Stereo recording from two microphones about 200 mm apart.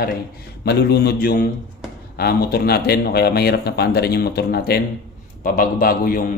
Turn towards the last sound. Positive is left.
turn(degrees=45)  # may be behind; listen again after turning